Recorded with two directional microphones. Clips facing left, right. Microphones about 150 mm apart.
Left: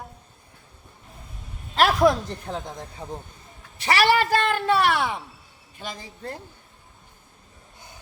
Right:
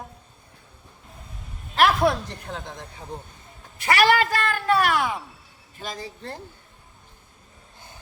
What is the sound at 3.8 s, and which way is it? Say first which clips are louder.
A woman's voice: right 1 dB; 25° left (ahead or behind).